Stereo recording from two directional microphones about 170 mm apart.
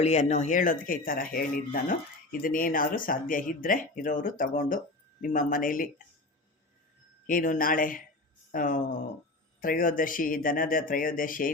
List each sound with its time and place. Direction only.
0.0 s speech: 40° left (ahead or behind)
7.3 s speech: 55° left (ahead or behind)